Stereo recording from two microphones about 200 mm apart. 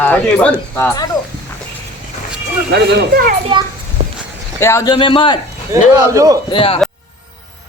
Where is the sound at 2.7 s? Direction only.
45° right (ahead or behind).